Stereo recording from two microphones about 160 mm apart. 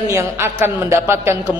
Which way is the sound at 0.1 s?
15° right (ahead or behind).